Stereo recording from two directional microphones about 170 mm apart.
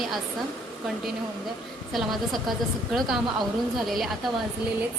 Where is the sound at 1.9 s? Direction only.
Centre (ahead or behind).